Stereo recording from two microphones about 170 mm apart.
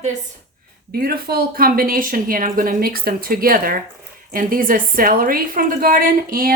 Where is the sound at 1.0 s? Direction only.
60° right (ahead or behind).